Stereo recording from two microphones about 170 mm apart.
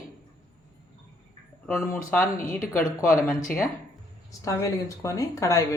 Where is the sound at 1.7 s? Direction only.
15° left (ahead or behind).